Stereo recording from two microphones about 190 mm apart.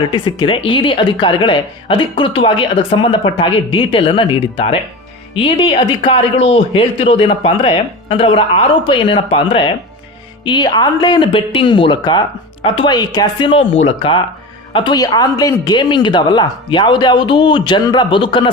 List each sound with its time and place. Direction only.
0.1 s speech: 25° left (ahead or behind)